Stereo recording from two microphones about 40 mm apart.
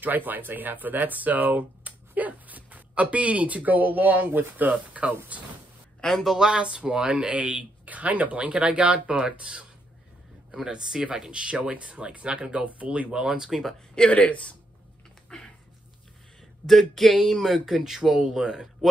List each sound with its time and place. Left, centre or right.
0.0 s a man's voice: right
4.7 s a man's voice: right
6.2 s speech: centre
6.5 s speech: right
10.7 s speech: centre; by 13.1 s right
13.1 s speech: right
13.5 s speech: centre
14.1 s speech: left
15.2 s a sound: centre
16.6 s speech: centre